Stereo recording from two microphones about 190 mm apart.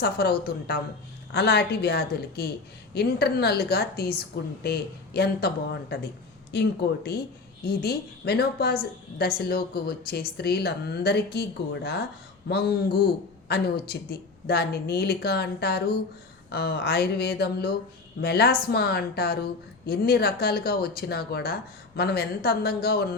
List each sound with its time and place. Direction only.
0.0 s a woman's voice: 55° left (ahead or behind)